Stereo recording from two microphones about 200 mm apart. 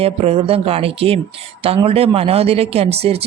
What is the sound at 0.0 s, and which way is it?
Speech, 30° right (ahead or behind).